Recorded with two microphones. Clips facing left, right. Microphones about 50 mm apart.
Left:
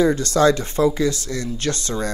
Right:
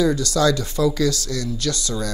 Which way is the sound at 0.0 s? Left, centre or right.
Left.